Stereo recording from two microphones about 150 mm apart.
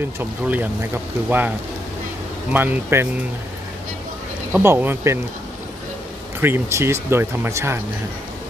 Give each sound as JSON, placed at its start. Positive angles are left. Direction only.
{"t": 0.2, "sound": "speech", "side_deg": -10}
{"t": 4.5, "sound": "speech", "side_deg": -15}
{"t": 6.4, "sound": "speech", "side_deg": -15}